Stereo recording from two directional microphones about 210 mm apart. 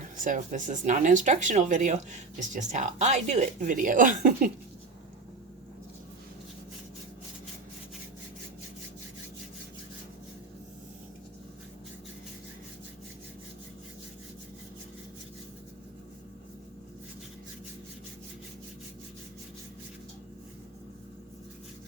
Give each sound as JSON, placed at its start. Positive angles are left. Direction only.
{"t": 0.3, "sound": "speech", "side_deg": -35}